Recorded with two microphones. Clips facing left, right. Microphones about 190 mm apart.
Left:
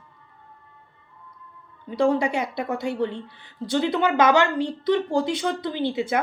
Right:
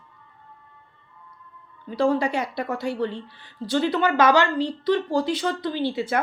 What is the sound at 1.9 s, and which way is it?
A woman's voice, 15° left (ahead or behind).